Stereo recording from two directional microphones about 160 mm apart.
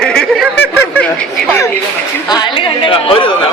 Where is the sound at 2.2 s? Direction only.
25° left (ahead or behind).